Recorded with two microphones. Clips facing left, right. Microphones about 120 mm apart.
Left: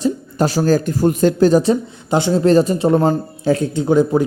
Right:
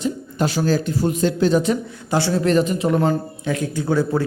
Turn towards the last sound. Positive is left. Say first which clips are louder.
# left 5 dB
turn(degrees=20)  # may be behind; listen again after turning